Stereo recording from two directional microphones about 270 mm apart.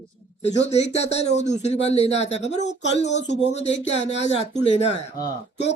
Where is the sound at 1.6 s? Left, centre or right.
Left.